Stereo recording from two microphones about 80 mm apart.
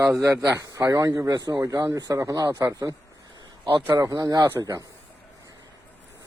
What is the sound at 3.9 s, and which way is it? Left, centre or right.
Speech, right.